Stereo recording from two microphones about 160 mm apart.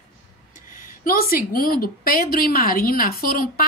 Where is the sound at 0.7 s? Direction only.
65° left (ahead or behind).